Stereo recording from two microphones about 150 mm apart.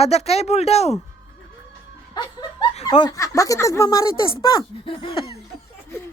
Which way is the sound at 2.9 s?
25° left (ahead or behind).